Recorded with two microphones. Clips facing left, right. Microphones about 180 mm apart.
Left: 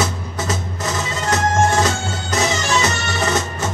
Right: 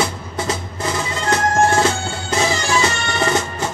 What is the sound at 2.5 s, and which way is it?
Music, 20° left (ahead or behind).